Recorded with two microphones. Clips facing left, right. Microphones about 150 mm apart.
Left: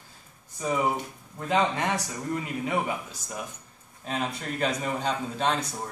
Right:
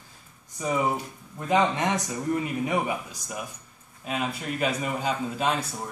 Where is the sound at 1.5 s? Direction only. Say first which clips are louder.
Right 2 dB; 20° right (ahead or behind).